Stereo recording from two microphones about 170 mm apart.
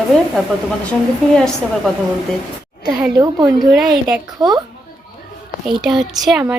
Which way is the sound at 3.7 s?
Centre (ahead or behind).